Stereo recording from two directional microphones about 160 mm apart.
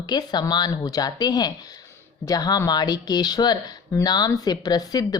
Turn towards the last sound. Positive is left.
turn(degrees=25)  # may be behind; listen again after turning